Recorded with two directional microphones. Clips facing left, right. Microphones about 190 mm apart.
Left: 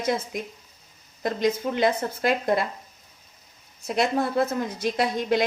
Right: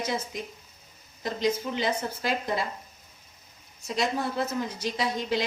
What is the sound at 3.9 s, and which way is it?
A woman's voice, 60° left (ahead or behind).